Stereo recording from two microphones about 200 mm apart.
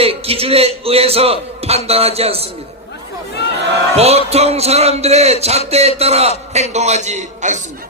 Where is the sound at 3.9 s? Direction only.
30° right (ahead or behind).